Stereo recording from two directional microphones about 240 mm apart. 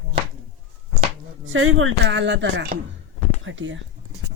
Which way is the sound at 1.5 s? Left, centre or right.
Right.